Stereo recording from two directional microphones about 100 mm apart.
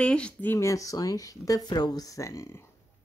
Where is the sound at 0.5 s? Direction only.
30° left (ahead or behind).